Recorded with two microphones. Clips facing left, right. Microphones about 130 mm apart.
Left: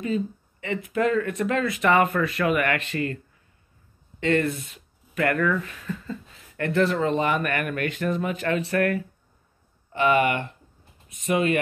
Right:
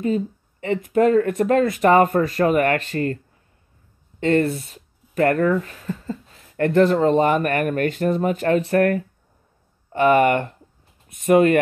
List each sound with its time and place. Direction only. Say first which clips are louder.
0.0 s speech: right 4 dB; 40° right (ahead or behind)
4.2 s speech: right 4 dB; 35° right (ahead or behind)